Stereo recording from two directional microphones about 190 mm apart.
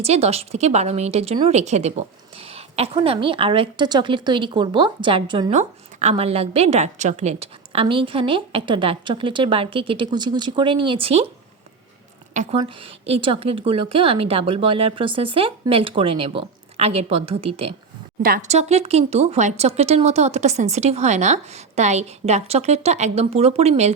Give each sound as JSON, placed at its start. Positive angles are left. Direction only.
{"t": 0.0, "sound": "a woman's voice", "side_deg": -35}
{"t": 5.5, "sound": "a woman's voice", "side_deg": -35}
{"t": 12.3, "sound": "a woman's voice", "side_deg": -40}
{"t": 12.5, "sound": "a woman's voice", "side_deg": -30}
{"t": 18.2, "sound": "speech", "side_deg": -50}